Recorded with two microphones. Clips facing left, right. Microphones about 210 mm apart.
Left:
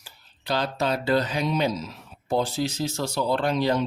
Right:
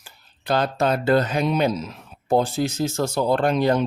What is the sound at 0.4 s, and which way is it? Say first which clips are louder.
Speech: right 4 dB; 50° right (ahead or behind).